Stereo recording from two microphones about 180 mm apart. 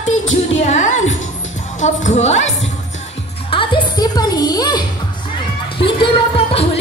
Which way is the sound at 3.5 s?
25° left (ahead or behind).